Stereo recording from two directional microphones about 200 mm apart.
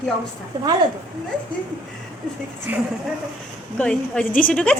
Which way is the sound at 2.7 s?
10° right (ahead or behind).